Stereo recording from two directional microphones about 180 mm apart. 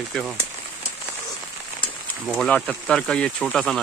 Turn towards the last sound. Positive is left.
turn(degrees=0)  # may be behind; listen again after turning